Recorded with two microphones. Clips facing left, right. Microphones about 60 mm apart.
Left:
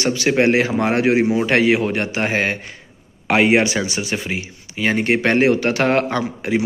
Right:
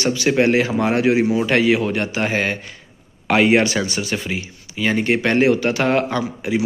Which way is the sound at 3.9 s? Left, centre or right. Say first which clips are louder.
Even; left.